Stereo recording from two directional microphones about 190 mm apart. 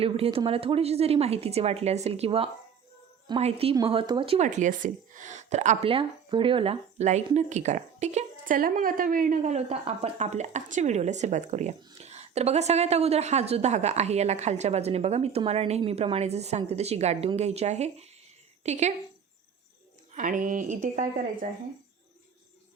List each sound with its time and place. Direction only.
0.0 s a woman's voice: 30° right (ahead or behind)
20.1 s a woman's voice: 45° right (ahead or behind)